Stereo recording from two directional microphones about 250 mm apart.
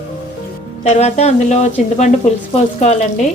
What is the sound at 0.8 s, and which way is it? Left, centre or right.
A woman's voice, left.